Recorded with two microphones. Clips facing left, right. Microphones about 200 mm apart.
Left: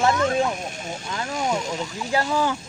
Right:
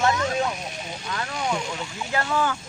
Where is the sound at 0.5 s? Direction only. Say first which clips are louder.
Left 3 dB; 50° left (ahead or behind).